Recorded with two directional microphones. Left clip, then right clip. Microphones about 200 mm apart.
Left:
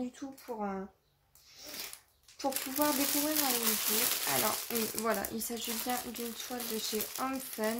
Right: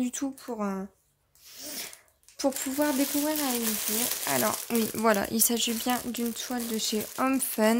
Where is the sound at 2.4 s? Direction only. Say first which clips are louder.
Right 7 dB; 60° right (ahead or behind).